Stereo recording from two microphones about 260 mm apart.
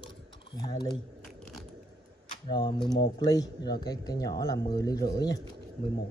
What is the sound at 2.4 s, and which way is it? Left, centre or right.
Speech, centre.